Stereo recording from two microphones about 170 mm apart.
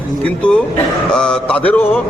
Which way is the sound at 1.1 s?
5° left (ahead or behind).